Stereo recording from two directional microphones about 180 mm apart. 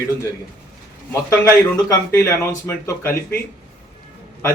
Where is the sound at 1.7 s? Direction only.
15° left (ahead or behind).